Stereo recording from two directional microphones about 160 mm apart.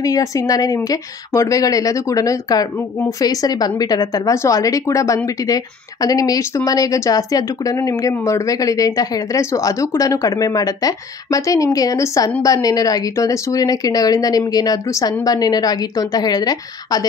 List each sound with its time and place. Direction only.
0.0 s a woman's voice: 20° left (ahead or behind)